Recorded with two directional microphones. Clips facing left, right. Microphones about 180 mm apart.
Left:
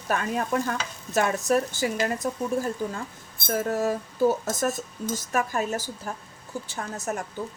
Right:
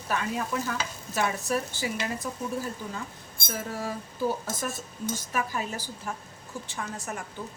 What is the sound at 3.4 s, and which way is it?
A woman's voice, 45° left (ahead or behind).